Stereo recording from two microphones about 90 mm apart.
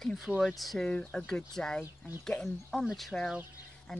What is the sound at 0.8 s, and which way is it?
Speech, 10° left (ahead or behind).